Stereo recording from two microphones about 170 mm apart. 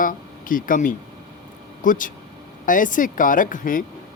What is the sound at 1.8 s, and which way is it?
Speech, 50° left (ahead or behind).